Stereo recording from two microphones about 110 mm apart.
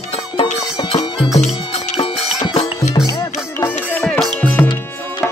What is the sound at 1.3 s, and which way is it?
Music, 90° left.